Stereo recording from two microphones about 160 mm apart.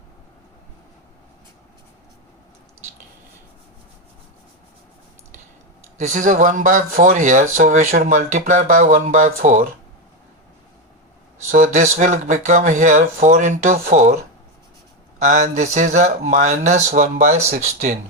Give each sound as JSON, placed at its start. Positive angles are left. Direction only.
{"t": 6.0, "sound": "speech", "side_deg": -50}
{"t": 11.5, "sound": "speech", "side_deg": -50}
{"t": 15.2, "sound": "speech", "side_deg": -50}
{"t": 17.2, "sound": "speech", "side_deg": -70}